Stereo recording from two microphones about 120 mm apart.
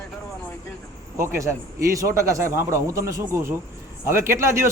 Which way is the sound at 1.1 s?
20° right (ahead or behind).